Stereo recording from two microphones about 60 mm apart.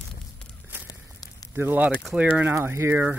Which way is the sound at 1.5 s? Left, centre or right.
Right.